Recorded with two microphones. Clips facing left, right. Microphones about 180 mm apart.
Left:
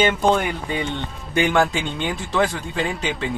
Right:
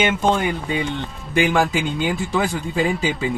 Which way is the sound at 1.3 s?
Centre (ahead or behind).